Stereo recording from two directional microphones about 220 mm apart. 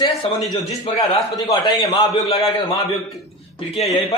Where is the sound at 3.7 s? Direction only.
30° left (ahead or behind).